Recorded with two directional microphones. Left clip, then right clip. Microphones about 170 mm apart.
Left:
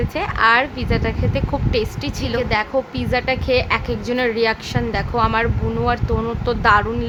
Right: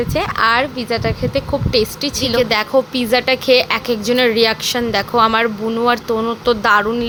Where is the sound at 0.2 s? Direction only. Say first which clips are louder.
Even; 15° right (ahead or behind).